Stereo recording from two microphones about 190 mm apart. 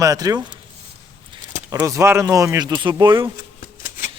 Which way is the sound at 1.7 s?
15° right (ahead or behind).